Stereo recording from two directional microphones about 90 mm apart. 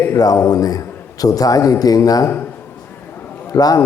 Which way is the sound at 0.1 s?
40° left (ahead or behind).